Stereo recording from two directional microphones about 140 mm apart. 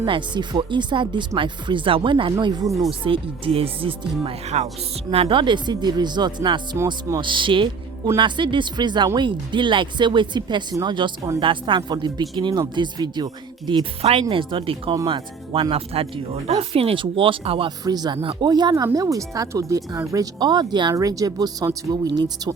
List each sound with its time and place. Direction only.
0.0 s speech: 35° right (ahead or behind)
2.4 s speech: 25° right (ahead or behind)
3.0 s speech: 40° right (ahead or behind)
5.1 s speech: 40° right (ahead or behind)
14.0 s speech: 45° right (ahead or behind)
17.8 s speech: 30° right (ahead or behind)